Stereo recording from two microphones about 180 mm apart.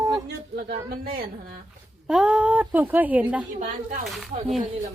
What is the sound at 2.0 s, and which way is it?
A woman's voice, 5° right (ahead or behind).